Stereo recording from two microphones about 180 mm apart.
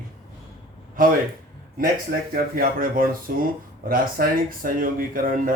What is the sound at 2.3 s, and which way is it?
Speech, 50° right (ahead or behind).